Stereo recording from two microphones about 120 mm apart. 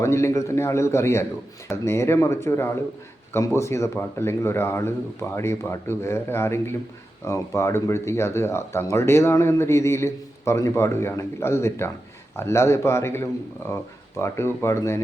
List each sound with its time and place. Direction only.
0.0 s speech: 25° left (ahead or behind)